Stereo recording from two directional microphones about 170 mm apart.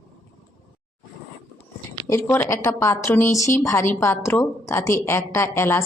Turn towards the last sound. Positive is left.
turn(degrees=15)  # may be behind; listen again after turning